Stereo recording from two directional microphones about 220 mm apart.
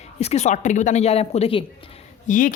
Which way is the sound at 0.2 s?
30° left (ahead or behind).